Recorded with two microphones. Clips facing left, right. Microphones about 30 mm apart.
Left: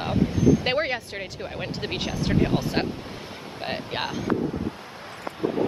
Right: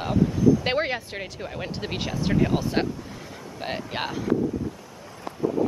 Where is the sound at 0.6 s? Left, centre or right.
Centre.